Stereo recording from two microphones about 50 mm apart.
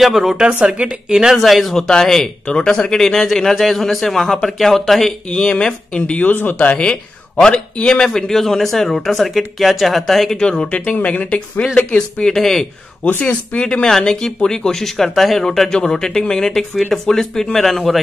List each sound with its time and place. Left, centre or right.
0.0 s speech: centre
0.4 s speech: right
0.8 s speech: centre
1.3 s speech: centre
5.3 s speech: centre
6.3 s speech: left
6.8 s speech: centre
10.3 s speech: centre
12.3 s speech: centre
13.2 s speech: left; by 18.0 s centre